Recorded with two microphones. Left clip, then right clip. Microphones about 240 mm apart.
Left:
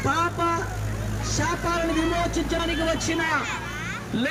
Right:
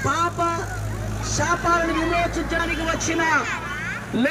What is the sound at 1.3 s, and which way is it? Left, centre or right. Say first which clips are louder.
Speech: right 5 dB; centre.